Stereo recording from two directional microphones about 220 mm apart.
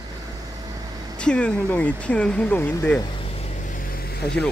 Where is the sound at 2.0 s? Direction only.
5° left (ahead or behind); by 4.3 s 45° left (ahead or behind).